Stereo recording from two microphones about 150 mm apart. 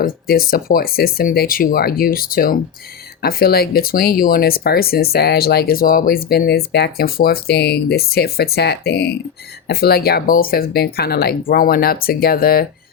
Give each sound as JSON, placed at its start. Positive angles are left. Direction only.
{"t": 0.0, "sound": "speech", "side_deg": 80}
{"t": 3.2, "sound": "speech", "side_deg": 85}